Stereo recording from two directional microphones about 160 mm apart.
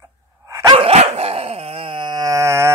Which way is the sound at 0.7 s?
40° right (ahead or behind).